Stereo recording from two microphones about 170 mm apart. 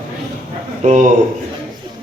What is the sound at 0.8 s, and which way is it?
Speech, 45° right (ahead or behind).